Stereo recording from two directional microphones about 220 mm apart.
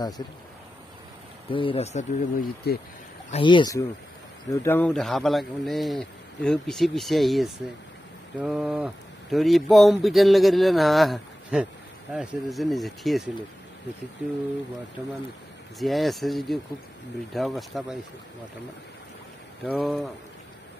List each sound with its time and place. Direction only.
1.5 s speech: 25° left (ahead or behind); by 2.8 s 40° left (ahead or behind)
3.3 s speech: 25° left (ahead or behind); by 13.2 s centre (ahead or behind)
15.8 s speech: centre (ahead or behind)
19.6 s speech: centre (ahead or behind)